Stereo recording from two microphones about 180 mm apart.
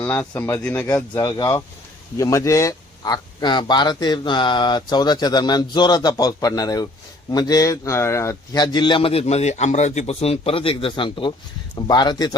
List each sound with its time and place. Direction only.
0.0 s speech: 10° left (ahead or behind)